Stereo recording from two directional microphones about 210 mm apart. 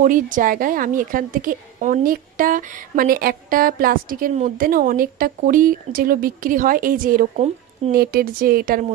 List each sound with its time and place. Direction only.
0.0 s a woman's voice: 40° right (ahead or behind)